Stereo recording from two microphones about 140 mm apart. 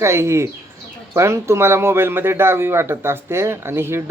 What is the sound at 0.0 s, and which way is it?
A man's voice, 20° right (ahead or behind).